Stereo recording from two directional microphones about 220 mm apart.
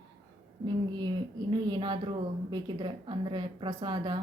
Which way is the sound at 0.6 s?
20° right (ahead or behind).